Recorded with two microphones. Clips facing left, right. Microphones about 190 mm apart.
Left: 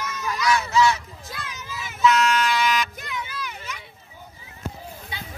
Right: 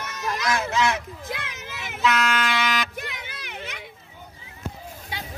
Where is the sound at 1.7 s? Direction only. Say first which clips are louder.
Left 4 dB; 60° right (ahead or behind).